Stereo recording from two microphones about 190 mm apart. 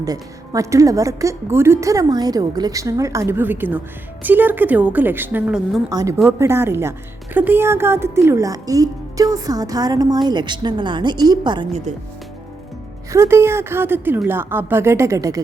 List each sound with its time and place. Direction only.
0.0 s a woman's voice: 20° right (ahead or behind)
5.9 s a woman's voice: 20° right (ahead or behind)
13.1 s a woman's voice: 15° right (ahead or behind)